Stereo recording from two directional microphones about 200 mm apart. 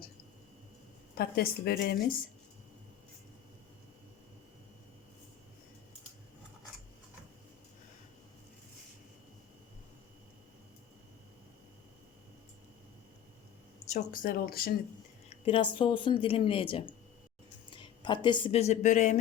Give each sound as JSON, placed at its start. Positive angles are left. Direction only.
{"t": 1.1, "sound": "a woman's voice", "side_deg": 50}
{"t": 13.9, "sound": "a woman's voice", "side_deg": 45}
{"t": 15.4, "sound": "speech", "side_deg": 25}